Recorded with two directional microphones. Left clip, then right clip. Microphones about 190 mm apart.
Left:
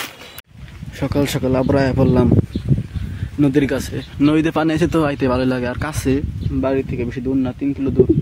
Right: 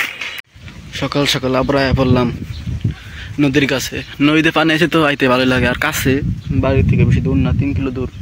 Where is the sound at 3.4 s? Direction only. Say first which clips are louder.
Right 2 dB; 10° left (ahead or behind).